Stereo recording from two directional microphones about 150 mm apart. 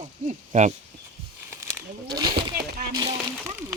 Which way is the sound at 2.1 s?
30° right (ahead or behind).